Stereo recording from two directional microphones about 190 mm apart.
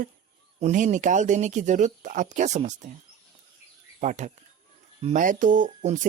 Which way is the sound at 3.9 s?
40° right (ahead or behind).